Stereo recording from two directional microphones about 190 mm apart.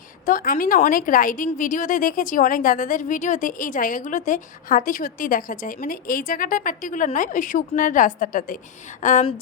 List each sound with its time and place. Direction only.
0.3 s a woman's voice: 45° left (ahead or behind)